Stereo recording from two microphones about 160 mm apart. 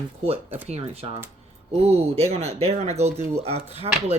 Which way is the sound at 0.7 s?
40° right (ahead or behind).